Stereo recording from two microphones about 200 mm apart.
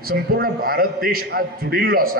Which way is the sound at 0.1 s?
50° right (ahead or behind).